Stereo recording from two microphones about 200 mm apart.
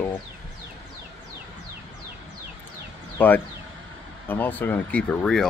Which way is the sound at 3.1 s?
10° left (ahead or behind).